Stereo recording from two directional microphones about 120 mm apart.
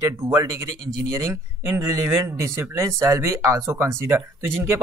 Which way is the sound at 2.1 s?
20° right (ahead or behind).